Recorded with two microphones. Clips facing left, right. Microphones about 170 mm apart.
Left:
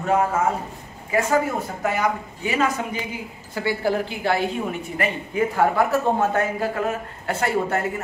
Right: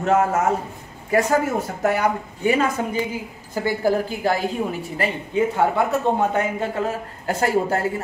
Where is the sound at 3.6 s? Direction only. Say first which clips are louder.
Right 2 dB; 40° right (ahead or behind); by 6.9 s 25° right (ahead or behind).